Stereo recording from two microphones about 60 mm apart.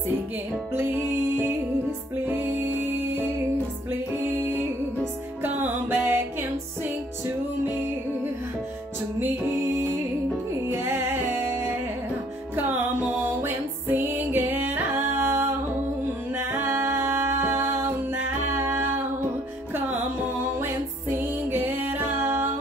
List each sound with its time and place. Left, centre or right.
0.7 s music: right
5.4 s music: right
10.7 s music: right
20.6 s music: right